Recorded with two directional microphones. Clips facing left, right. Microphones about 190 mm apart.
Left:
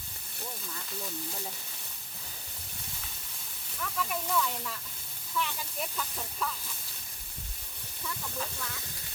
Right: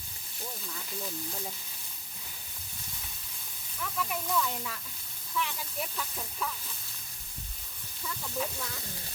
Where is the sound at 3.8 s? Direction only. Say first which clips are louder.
Even; centre (ahead or behind).